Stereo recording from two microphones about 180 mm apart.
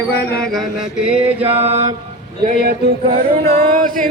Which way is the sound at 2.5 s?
60° right (ahead or behind).